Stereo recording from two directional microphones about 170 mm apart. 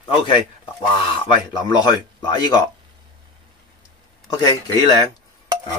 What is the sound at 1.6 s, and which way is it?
Speech, 25° left (ahead or behind).